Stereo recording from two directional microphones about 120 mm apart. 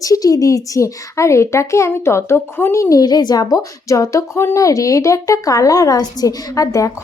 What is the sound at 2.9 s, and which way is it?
Speech, 35° left (ahead or behind).